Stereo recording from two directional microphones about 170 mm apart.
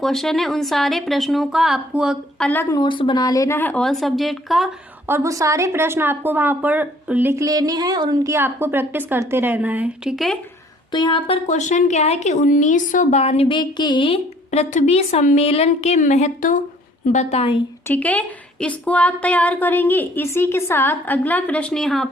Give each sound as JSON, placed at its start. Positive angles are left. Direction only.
{"t": 0.0, "sound": "speech", "side_deg": 0}
{"t": 2.5, "sound": "speech", "side_deg": 15}
{"t": 5.0, "sound": "a woman's voice", "side_deg": -15}
{"t": 10.9, "sound": "speech", "side_deg": 30}
{"t": 11.4, "sound": "a woman's voice", "side_deg": 45}
{"t": 17.1, "sound": "a woman's voice", "side_deg": 40}
{"t": 17.8, "sound": "speech", "side_deg": 10}